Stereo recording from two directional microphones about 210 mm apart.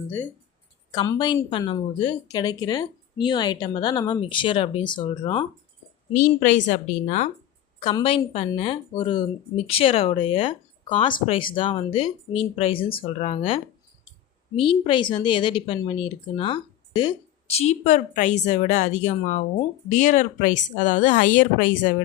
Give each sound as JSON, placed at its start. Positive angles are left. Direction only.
{"t": 0.9, "sound": "speech", "side_deg": 15}
{"t": 6.1, "sound": "speech", "side_deg": 35}